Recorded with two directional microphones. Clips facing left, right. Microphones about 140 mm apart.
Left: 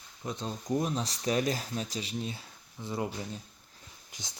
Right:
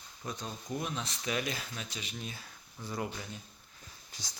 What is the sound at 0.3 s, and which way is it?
Speech, 25° left (ahead or behind).